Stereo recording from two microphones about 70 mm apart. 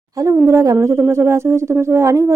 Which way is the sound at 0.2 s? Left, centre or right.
Right.